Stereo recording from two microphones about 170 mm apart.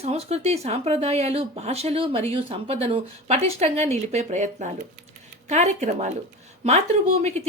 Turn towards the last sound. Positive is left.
turn(degrees=-40)  # may be behind; listen again after turning